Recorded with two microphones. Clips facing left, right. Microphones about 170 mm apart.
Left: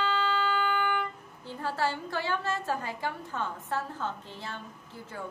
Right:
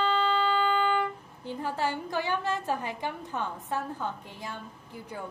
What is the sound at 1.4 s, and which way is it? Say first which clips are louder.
A woman's voice: even; 15° right (ahead or behind).